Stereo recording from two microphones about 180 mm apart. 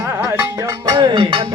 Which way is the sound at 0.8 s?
25° right (ahead or behind).